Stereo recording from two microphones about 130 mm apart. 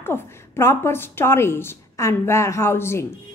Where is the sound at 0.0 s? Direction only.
20° left (ahead or behind).